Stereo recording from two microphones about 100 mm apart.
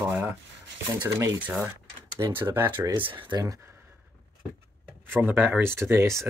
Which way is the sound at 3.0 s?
60° right (ahead or behind).